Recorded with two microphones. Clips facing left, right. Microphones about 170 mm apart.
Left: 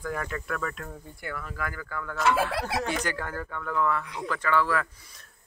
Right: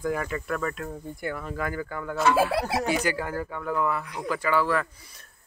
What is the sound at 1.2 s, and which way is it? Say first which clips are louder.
Speech: right 4 dB; 25° right (ahead or behind).